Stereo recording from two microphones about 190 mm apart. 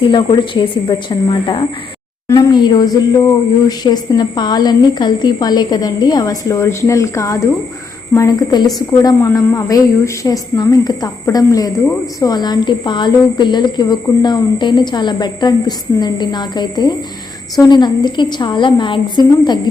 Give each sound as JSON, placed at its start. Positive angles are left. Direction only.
{"t": 0.0, "sound": "speech", "side_deg": 25}